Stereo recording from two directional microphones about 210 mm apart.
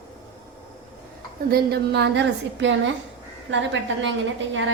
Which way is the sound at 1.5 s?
45° right (ahead or behind).